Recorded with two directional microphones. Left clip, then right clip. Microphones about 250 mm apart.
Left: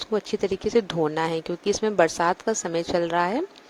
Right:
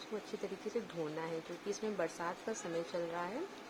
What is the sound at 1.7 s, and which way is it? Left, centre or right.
Speech, left.